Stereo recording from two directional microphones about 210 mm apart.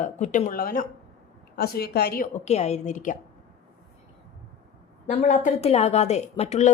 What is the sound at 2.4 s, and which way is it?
Speech, 30° left (ahead or behind).